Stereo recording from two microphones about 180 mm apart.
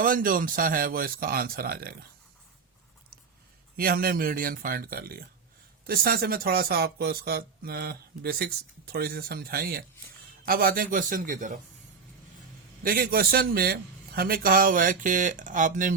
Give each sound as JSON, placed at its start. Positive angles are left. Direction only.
{"t": 0.0, "sound": "speech", "side_deg": -50}
{"t": 3.8, "sound": "speech", "side_deg": -55}
{"t": 12.8, "sound": "speech", "side_deg": -55}